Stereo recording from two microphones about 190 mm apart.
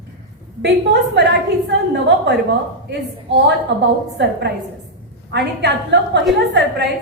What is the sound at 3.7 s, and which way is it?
Speech, 65° right (ahead or behind).